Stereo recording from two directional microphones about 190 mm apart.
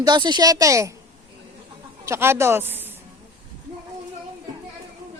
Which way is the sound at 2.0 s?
15° right (ahead or behind).